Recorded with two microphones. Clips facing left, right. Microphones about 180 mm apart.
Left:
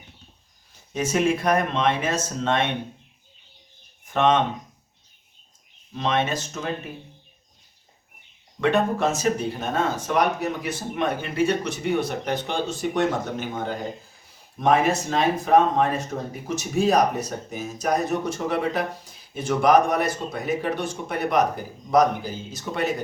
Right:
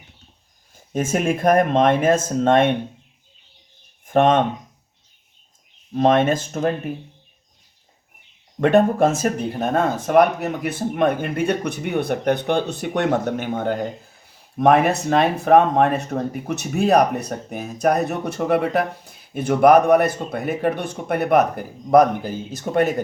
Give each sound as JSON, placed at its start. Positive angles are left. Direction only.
{"t": 0.9, "sound": "speech", "side_deg": -50}
{"t": 4.0, "sound": "speech", "side_deg": -50}
{"t": 5.9, "sound": "speech", "side_deg": -50}
{"t": 8.6, "sound": "speech", "side_deg": -50}